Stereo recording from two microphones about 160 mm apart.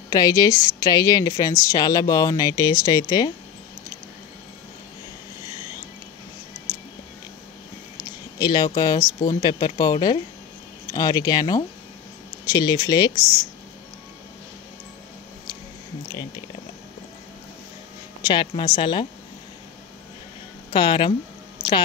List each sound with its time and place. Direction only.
0.1 s speech: 20° left (ahead or behind)
8.0 s speech: 25° left (ahead or behind)
18.2 s a woman's voice: 30° left (ahead or behind)
20.7 s a woman's voice: 30° left (ahead or behind)